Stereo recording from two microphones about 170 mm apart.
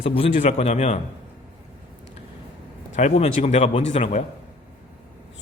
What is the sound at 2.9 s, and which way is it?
A man's voice, 40° left (ahead or behind).